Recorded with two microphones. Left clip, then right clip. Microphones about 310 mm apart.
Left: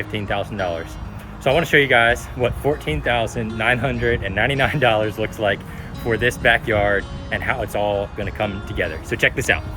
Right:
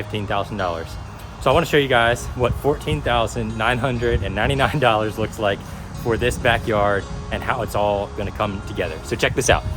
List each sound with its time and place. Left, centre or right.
0.1 s speech: centre